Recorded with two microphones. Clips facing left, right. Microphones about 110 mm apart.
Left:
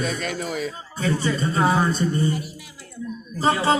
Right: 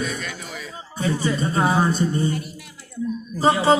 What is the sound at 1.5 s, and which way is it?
Speech, 20° right (ahead or behind).